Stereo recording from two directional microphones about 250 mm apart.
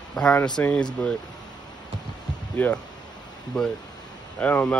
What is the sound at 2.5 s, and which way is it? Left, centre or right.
Speech, centre.